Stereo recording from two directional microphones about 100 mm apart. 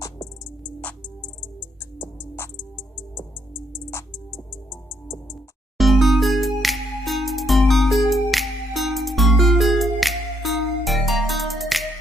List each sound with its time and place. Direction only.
2.0 s music: 25° left (ahead or behind)
5.0 s music: 25° left (ahead or behind)
5.8 s music: centre (ahead or behind)